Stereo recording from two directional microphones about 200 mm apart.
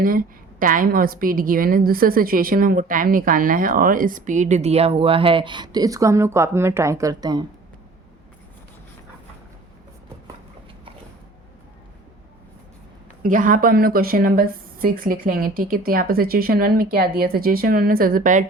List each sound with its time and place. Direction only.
0.0 s a woman's voice: 45° right (ahead or behind); by 7.4 s 20° right (ahead or behind)
13.2 s a woman's voice: 40° right (ahead or behind)